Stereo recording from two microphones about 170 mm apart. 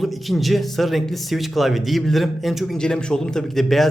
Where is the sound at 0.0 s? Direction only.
Centre (ahead or behind).